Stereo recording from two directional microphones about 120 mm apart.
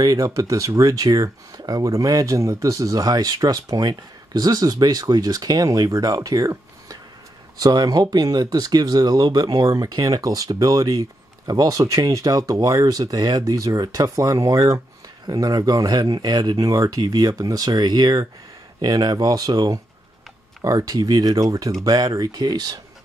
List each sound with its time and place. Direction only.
0.0 s speech: 30° right (ahead or behind)